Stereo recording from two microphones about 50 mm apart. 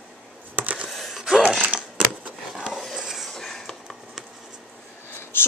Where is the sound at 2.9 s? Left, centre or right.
Centre.